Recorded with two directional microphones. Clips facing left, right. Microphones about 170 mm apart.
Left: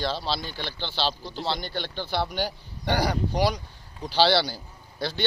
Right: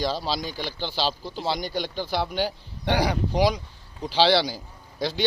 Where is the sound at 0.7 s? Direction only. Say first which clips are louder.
Right 1 dB; 10° right (ahead or behind).